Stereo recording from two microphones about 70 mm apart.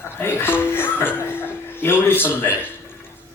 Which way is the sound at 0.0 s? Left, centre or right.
Left.